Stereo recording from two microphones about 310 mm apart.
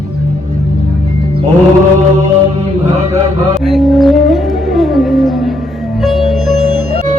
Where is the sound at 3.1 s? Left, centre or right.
Centre.